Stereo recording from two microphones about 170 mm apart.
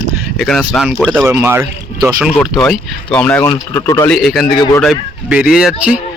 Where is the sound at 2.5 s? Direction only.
Centre (ahead or behind).